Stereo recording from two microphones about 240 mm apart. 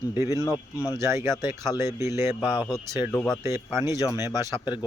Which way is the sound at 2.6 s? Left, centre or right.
Centre.